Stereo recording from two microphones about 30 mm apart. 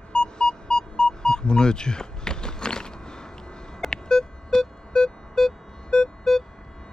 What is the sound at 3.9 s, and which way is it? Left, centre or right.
Music, left.